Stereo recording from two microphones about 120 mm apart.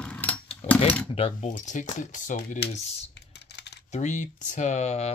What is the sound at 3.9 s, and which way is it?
Speech, 85° left.